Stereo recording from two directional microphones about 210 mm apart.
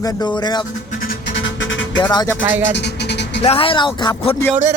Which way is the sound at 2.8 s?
55° left (ahead or behind).